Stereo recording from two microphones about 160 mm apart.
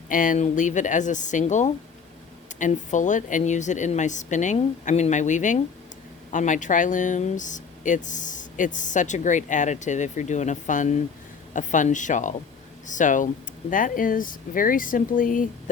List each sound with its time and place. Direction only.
0.1 s speech: 55° left (ahead or behind)